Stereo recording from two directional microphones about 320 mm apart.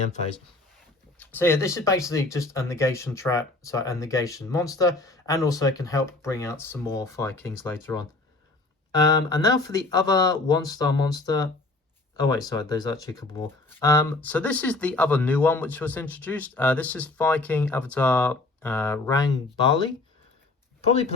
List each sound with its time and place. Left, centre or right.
1.2 s speech: centre